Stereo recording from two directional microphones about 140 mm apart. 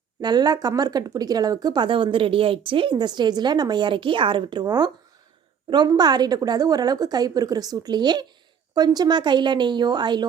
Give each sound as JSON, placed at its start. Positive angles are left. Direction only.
{"t": 0.2, "sound": "a woman's voice", "side_deg": -30}